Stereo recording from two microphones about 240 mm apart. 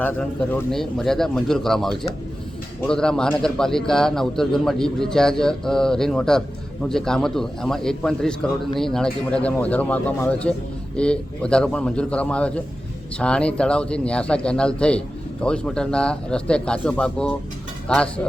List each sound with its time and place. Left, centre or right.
0.0 s speech: centre